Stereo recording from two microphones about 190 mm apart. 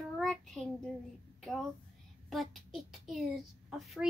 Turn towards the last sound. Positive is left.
turn(degrees=-5)  # may be behind; listen again after turning